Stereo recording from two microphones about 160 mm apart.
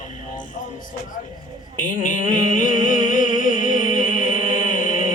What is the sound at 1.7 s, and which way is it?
Speech, 55° left (ahead or behind).